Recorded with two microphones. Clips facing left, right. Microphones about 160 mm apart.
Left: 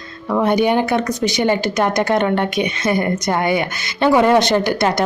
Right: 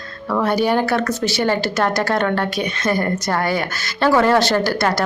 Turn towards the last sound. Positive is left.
turn(degrees=20)  # may be behind; listen again after turning